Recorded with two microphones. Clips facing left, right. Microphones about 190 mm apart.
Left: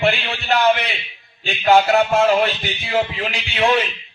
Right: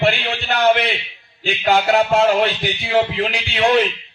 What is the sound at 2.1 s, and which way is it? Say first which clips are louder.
Music: right 1 dB; 60° right (ahead or behind).